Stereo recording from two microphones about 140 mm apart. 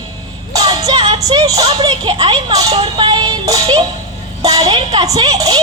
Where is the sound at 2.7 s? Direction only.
40° right (ahead or behind).